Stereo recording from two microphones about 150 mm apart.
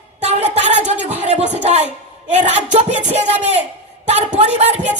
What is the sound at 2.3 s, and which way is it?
A woman's voice, 45° right (ahead or behind).